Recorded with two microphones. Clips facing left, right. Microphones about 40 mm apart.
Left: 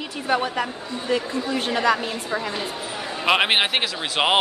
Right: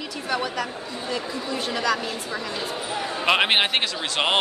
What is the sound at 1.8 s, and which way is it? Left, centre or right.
Speech, left.